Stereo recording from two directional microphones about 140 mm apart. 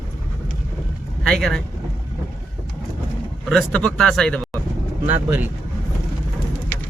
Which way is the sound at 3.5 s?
5° left (ahead or behind).